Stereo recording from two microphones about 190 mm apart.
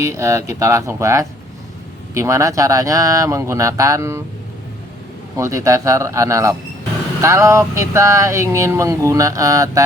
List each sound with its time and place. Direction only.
0.0 s speech: 15° right (ahead or behind)
5.4 s speech: 15° right (ahead or behind)